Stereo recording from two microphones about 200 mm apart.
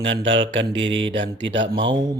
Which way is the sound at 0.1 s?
65° right (ahead or behind).